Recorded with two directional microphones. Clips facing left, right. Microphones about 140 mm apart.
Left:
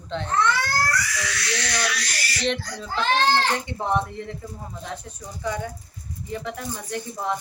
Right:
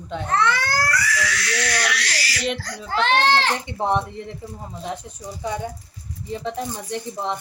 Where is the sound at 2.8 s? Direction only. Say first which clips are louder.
Right 3 dB; 70° right (ahead or behind).